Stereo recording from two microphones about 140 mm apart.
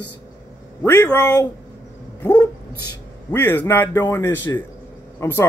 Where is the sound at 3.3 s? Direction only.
10° left (ahead or behind).